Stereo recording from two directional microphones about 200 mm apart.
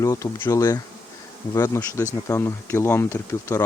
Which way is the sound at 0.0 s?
15° left (ahead or behind).